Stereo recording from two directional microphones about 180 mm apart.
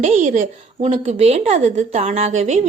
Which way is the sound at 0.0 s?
45° right (ahead or behind).